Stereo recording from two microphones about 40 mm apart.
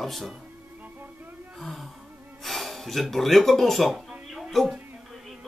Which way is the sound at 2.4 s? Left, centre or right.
Centre.